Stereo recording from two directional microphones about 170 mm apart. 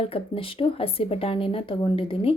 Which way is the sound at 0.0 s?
35° left (ahead or behind).